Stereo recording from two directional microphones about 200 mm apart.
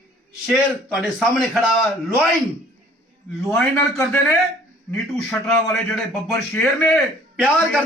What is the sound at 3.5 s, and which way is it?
A man's voice, 10° left (ahead or behind).